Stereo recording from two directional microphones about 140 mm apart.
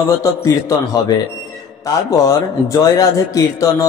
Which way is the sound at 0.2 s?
25° left (ahead or behind).